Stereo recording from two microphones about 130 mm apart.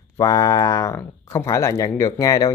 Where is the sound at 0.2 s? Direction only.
25° left (ahead or behind).